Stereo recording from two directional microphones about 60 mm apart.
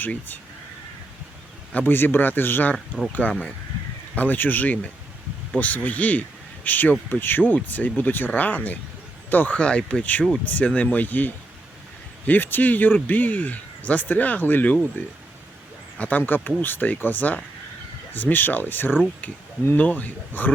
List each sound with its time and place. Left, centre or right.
0.0 s speech: left
1.7 s speech: left
16.0 s speech: left